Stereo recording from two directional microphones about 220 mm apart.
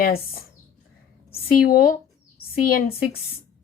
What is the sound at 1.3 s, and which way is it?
Speech, 40° left (ahead or behind).